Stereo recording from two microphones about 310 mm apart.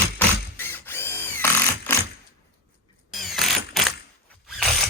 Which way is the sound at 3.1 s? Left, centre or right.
Centre.